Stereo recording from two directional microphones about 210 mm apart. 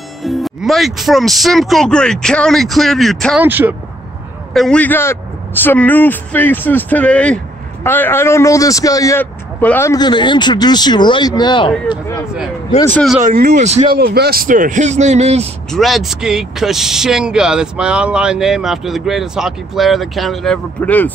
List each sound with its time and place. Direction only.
0.2 s speech: centre (ahead or behind)
3.4 s speech: 10° right (ahead or behind)
4.6 s speech: 5° left (ahead or behind); by 12.0 s 20° left (ahead or behind)
12.8 s speech: 10° left (ahead or behind)
13.2 s a man's voice: 35° right (ahead or behind)
13.9 s a man's voice: 50° right (ahead or behind); by 15.4 s 30° right (ahead or behind)
15.7 s speech: centre (ahead or behind)